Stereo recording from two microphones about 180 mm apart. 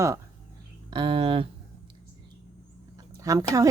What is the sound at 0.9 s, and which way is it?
Speech, 25° right (ahead or behind).